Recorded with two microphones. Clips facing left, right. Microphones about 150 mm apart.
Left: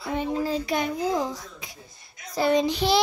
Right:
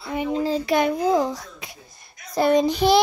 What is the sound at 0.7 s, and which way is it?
A child's voice, 70° right (ahead or behind).